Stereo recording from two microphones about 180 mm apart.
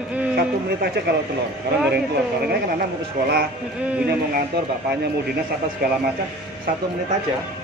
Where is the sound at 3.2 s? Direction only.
60° right (ahead or behind).